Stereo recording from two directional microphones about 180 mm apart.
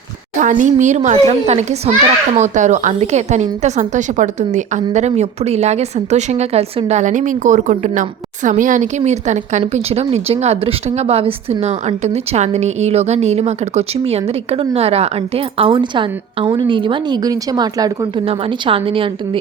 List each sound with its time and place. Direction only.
0.3 s a woman's voice: 45° right (ahead or behind)